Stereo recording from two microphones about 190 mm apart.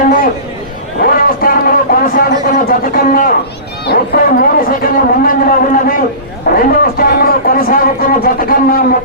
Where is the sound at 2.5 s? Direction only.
45° left (ahead or behind).